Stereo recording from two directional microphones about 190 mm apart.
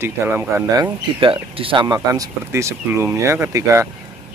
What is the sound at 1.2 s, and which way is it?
Speech, 30° right (ahead or behind).